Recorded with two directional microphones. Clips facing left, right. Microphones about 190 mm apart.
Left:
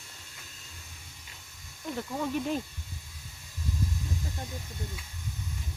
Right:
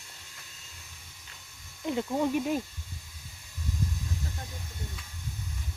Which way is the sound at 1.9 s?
20° right (ahead or behind).